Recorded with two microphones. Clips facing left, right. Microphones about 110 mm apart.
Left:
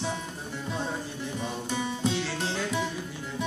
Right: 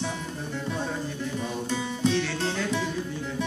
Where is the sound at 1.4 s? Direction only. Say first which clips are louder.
Even; 15° left (ahead or behind).